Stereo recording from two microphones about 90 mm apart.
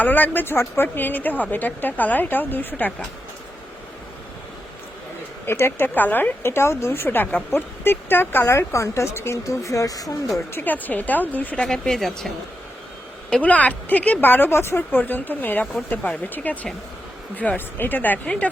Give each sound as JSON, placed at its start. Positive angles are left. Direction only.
{"t": 0.0, "sound": "a woman's voice", "side_deg": 20}
{"t": 5.5, "sound": "a woman's voice", "side_deg": 25}
{"t": 10.5, "sound": "a woman's voice", "side_deg": 20}
{"t": 11.6, "sound": "speech", "side_deg": 5}
{"t": 13.3, "sound": "a woman's voice", "side_deg": 15}